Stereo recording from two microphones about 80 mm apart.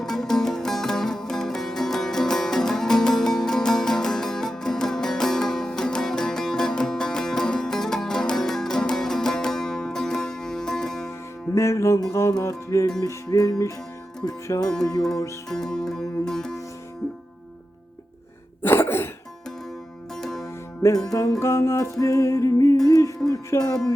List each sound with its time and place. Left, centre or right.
0.0 s music: centre
11.5 s music: left
12.4 s speech: left
15.4 s music: centre
18.6 s cough: left
20.1 s music: centre
20.4 s music: left
22.8 s speech: left